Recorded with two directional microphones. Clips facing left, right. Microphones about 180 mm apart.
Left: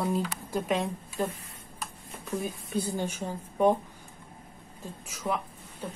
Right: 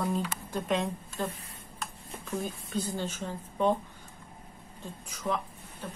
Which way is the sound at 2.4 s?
10° left (ahead or behind).